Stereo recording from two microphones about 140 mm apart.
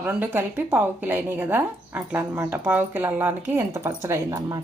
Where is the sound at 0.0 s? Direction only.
10° right (ahead or behind).